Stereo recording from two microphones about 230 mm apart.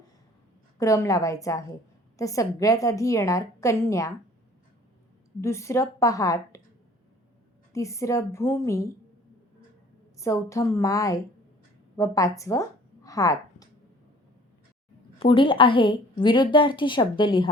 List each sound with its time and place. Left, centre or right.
0.8 s a woman's voice: centre
5.4 s a woman's voice: centre
7.7 s a woman's voice: centre
10.2 s a woman's voice: centre
15.2 s a woman's voice: left